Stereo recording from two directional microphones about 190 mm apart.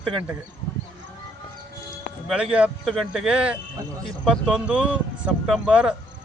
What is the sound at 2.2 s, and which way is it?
Speech, 5° right (ahead or behind).